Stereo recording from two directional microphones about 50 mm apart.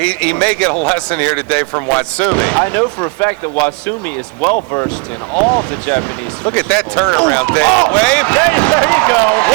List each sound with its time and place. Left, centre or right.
0.0 s speech: left